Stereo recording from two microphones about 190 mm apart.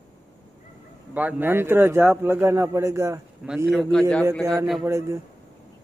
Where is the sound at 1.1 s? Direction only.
10° right (ahead or behind).